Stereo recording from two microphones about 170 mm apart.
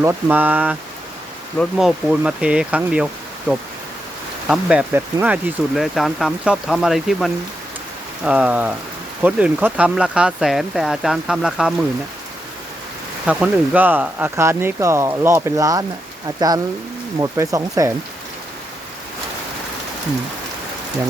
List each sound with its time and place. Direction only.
0.0 s speech: 15° right (ahead or behind)
3.5 s speech: 5° left (ahead or behind)
4.4 s speech: 5° right (ahead or behind)
13.2 s speech: 10° right (ahead or behind)
17.2 s speech: 20° right (ahead or behind)